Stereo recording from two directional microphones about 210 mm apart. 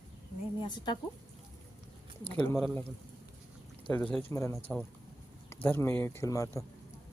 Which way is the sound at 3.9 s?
5° left (ahead or behind).